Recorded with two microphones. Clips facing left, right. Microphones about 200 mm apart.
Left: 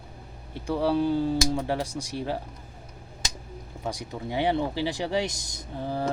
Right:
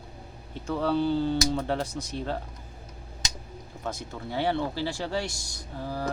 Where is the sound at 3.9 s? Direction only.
15° left (ahead or behind).